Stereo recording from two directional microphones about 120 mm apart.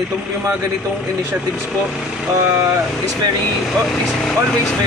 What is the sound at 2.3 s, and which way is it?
Speech, 20° right (ahead or behind).